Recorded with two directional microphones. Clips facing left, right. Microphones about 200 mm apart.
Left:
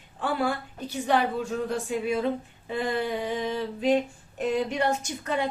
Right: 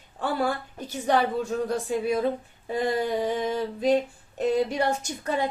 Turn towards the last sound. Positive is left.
turn(degrees=-40)  # may be behind; listen again after turning